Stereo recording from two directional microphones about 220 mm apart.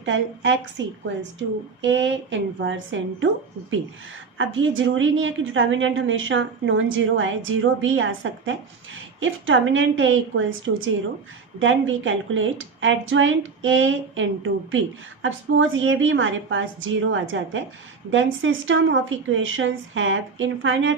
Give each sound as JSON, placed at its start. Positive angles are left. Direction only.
{"t": 0.0, "sound": "a woman's voice", "side_deg": -55}
{"t": 4.4, "sound": "a woman's voice", "side_deg": -60}